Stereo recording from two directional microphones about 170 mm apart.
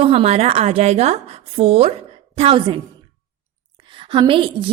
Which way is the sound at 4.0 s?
30° right (ahead or behind).